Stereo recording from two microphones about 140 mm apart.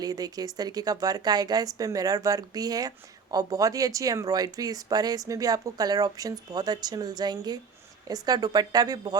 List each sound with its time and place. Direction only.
0.0 s speech: 25° right (ahead or behind)